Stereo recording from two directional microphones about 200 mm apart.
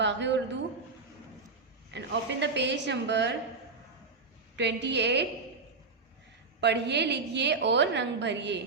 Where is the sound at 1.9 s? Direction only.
60° right (ahead or behind).